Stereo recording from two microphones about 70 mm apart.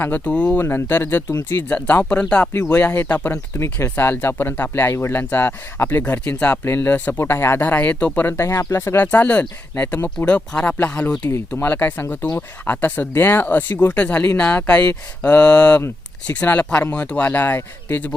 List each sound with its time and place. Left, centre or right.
0.0 s speech: left
0.5 s speech: left
2.0 s speech: centre
7.2 s speech: left
7.9 s speech: centre
8.2 s speech: left
8.4 s speech: left
9.0 s speech: left
10.2 s speech: centre